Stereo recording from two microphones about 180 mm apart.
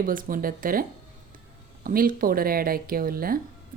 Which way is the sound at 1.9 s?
50° right (ahead or behind).